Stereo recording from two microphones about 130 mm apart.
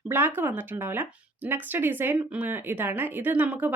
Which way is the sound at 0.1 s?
15° right (ahead or behind).